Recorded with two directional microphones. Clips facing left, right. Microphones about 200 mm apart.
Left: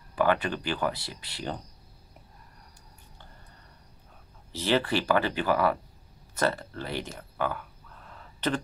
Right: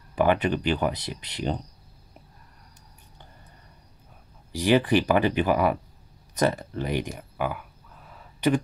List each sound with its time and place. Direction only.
0.1 s speech: 20° right (ahead or behind)
4.5 s speech: 15° right (ahead or behind)
6.3 s a sound: 15° right (ahead or behind)